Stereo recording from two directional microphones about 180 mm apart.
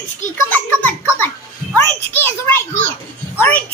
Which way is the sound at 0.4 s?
10° left (ahead or behind).